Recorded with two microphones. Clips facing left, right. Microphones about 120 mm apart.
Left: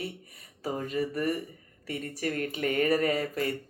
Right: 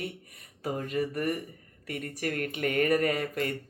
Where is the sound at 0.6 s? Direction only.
30° left (ahead or behind).